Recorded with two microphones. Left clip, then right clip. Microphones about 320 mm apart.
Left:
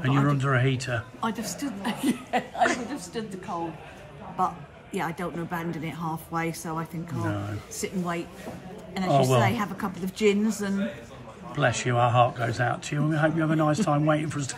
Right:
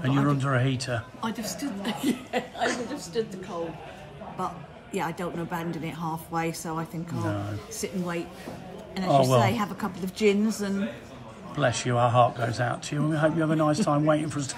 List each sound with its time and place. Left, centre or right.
0.0 s speech: centre
1.4 s a woman's voice: centre
4.9 s speech: centre